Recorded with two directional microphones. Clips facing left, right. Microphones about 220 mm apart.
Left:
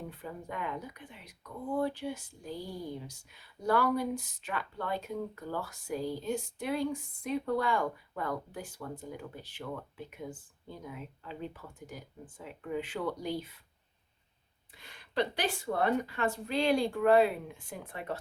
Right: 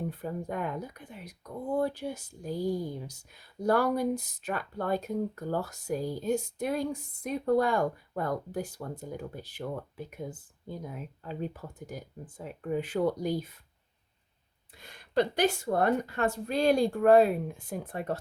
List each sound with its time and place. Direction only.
0.2 s speech: 45° right (ahead or behind)
10.7 s speech: 40° right (ahead or behind)
14.8 s speech: 45° right (ahead or behind)